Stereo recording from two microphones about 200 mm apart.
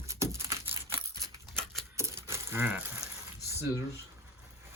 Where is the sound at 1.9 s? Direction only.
15° right (ahead or behind).